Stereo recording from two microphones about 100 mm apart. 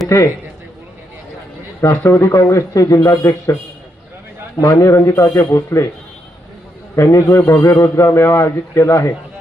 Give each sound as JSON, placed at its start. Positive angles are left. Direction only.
{"t": 1.8, "sound": "a man's voice", "side_deg": 25}
{"t": 4.6, "sound": "a man's voice", "side_deg": 30}
{"t": 6.9, "sound": "a man's voice", "side_deg": 30}